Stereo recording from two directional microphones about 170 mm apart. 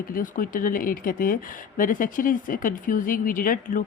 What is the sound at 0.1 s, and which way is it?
Speech, 55° left (ahead or behind).